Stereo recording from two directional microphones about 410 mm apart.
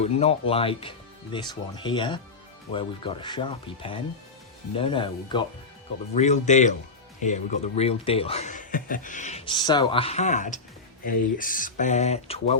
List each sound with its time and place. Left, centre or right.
0.0 s speech: centre